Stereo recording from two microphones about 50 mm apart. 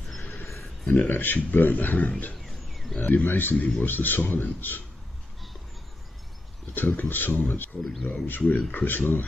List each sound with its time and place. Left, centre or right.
0.8 s speech: left
2.4 s wild animals: centre
3.0 s speech: left
6.7 s speech: left